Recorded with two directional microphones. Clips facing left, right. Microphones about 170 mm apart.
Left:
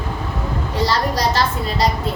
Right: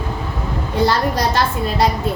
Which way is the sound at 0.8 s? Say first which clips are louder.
Right 2 dB; 55° right (ahead or behind).